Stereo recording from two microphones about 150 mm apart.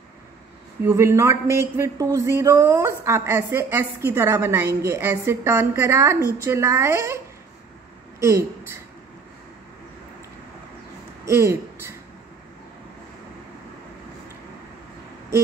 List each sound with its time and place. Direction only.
0.8 s a woman's voice: 20° right (ahead or behind)
8.2 s a woman's voice: 20° right (ahead or behind)
11.2 s speech: 15° right (ahead or behind)